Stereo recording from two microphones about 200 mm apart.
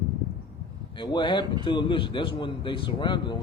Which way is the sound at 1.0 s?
20° left (ahead or behind).